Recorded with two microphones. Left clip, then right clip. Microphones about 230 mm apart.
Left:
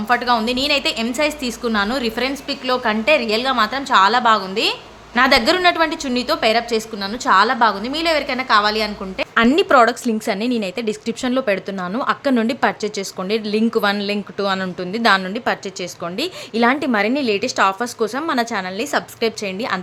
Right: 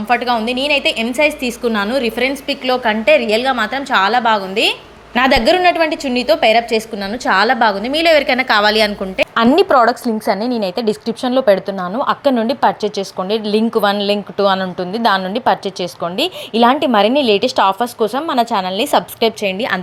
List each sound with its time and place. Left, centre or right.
0.1 s a woman's voice: centre
5.5 s a woman's voice: centre